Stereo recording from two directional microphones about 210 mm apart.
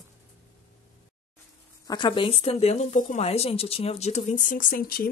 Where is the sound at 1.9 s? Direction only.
20° left (ahead or behind).